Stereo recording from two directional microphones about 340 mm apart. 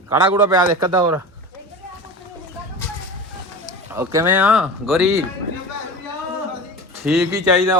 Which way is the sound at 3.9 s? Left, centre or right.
Centre.